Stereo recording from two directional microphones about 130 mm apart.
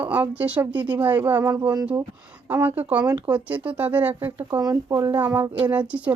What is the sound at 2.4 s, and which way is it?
Speech, 15° right (ahead or behind).